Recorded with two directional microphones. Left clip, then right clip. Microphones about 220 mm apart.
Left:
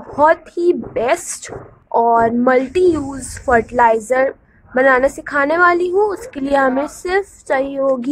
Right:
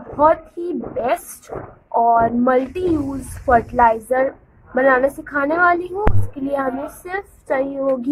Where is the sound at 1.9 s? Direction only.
40° left (ahead or behind).